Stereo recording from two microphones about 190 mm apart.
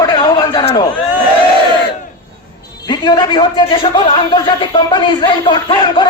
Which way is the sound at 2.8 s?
20° left (ahead or behind).